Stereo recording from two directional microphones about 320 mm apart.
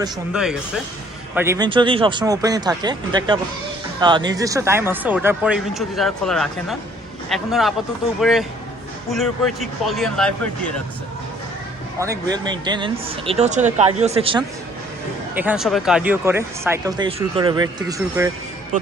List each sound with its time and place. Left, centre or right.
1.4 s speech: centre
12.3 s speech: centre
15.4 s speech: centre